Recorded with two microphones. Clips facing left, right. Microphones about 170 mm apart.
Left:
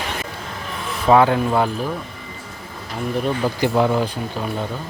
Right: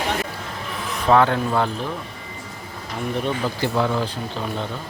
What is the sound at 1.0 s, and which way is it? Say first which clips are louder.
Speech: left 3 dB; 10° left (ahead or behind).